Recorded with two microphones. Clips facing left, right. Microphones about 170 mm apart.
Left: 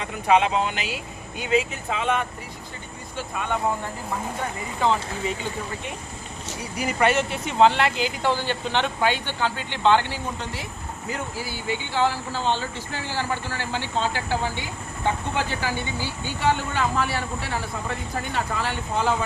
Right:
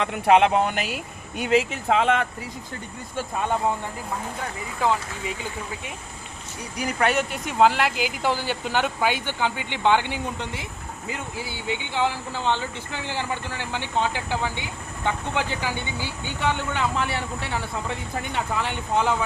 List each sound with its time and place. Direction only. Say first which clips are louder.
0.0 s speech: right 3 dB; 65° right (ahead or behind); by 0.9 s 50° right (ahead or behind)
1.4 s speech: right 2 dB; 80° right
4.8 s speech: left 1 dB; 5° right (ahead or behind)
6.7 s speech: left 1 dB; 5° left (ahead or behind); by 19.1 s 20° right (ahead or behind)